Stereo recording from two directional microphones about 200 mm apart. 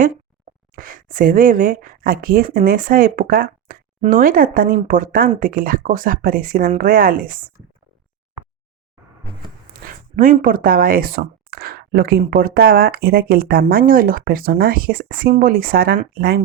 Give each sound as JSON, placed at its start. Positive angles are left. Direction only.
{"t": 0.8, "sound": "speech", "side_deg": -45}
{"t": 9.8, "sound": "speech", "side_deg": -40}